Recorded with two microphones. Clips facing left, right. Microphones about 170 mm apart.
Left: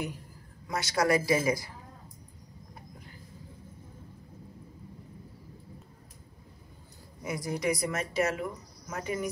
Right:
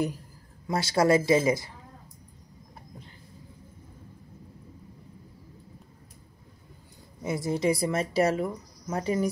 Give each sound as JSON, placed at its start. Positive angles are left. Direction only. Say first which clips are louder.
{"t": 0.7, "sound": "speech", "louder": "right 4 dB", "side_deg": -30}
{"t": 7.2, "sound": "speech", "louder": "right 5 dB", "side_deg": -25}